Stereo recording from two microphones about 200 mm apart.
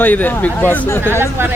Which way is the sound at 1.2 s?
10° right (ahead or behind).